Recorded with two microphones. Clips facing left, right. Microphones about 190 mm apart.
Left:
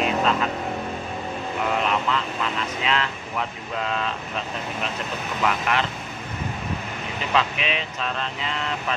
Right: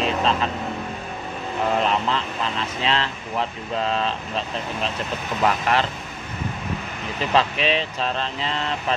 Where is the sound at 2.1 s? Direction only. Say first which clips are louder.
Even; 30° right (ahead or behind).